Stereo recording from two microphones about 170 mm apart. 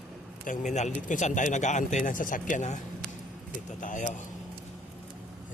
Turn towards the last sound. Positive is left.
turn(degrees=50)  # may be behind; listen again after turning